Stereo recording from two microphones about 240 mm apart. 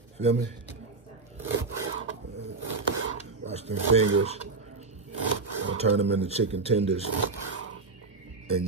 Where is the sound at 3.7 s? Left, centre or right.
Right.